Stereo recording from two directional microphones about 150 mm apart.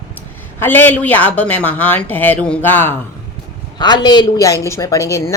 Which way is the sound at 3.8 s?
30° left (ahead or behind).